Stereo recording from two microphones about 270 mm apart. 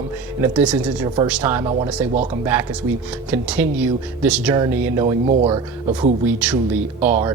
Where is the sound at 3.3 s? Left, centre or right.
Centre.